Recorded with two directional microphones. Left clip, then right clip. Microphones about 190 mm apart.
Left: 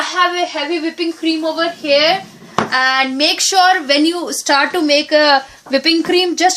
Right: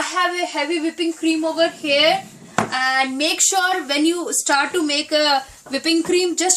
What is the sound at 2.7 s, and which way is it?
A woman's voice, 30° left (ahead or behind).